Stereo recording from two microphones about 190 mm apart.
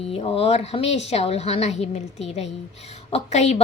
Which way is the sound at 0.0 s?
30° left (ahead or behind).